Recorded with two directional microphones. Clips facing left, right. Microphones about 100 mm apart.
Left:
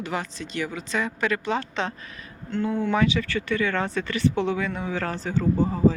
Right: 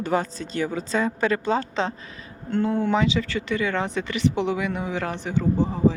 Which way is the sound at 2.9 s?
25° right (ahead or behind).